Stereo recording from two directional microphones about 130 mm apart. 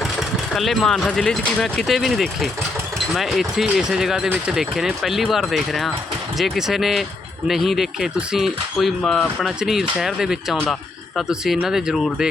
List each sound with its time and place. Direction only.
0.2 s speech: centre (ahead or behind)